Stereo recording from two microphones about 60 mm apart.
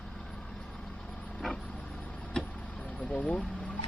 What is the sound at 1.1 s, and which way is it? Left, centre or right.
Vehicle, left.